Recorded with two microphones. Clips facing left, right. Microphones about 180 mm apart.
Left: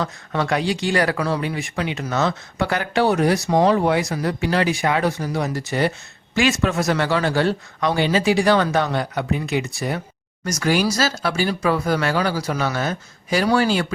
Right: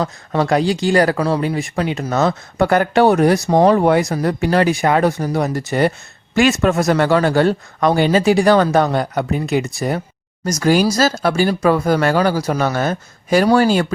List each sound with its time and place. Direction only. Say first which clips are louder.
0.0 s speech: right 5 dB; 35° right (ahead or behind)